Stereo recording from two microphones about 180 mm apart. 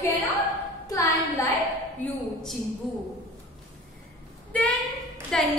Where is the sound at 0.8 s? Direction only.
20° left (ahead or behind).